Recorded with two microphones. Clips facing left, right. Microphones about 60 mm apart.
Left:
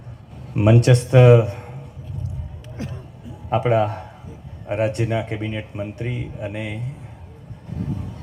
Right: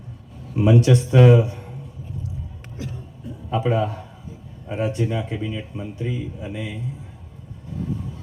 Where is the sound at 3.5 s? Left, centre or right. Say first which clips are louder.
Left 3 dB; left.